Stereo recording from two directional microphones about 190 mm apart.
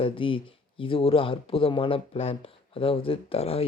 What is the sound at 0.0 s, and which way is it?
Speech, 30° left (ahead or behind).